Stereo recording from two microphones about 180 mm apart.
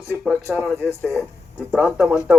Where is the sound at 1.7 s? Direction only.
Centre (ahead or behind).